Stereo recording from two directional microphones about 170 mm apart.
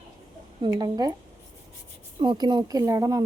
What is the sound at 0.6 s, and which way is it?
Speech, 20° right (ahead or behind).